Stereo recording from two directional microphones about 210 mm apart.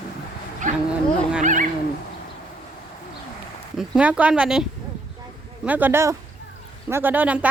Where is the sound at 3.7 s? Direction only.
5° right (ahead or behind).